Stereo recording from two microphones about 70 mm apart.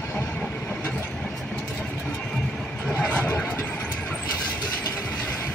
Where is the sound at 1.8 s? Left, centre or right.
Centre.